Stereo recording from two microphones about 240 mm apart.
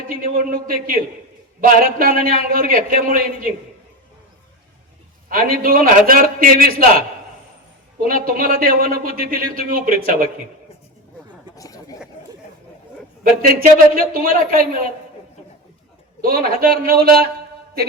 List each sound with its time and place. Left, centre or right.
0.1 s a man's voice: right
5.3 s a man's voice: right
8.0 s a man's voice: right
11.5 s a sound: centre
13.5 s a man's voice: right
16.2 s a man's voice: right